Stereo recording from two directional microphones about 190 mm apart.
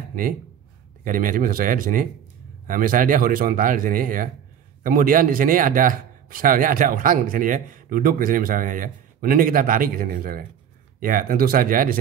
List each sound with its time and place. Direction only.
0.1 s speech: 45° right (ahead or behind)